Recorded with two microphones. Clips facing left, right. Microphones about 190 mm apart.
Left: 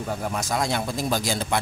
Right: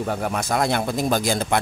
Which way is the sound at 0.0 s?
65° right (ahead or behind).